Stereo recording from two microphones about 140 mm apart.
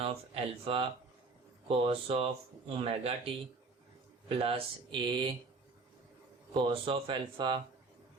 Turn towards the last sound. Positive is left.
turn(degrees=-35)  # may be behind; listen again after turning